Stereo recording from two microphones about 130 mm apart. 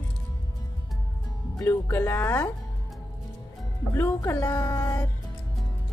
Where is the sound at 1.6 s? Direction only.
15° left (ahead or behind).